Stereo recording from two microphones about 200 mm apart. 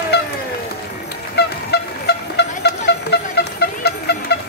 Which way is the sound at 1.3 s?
55° left (ahead or behind).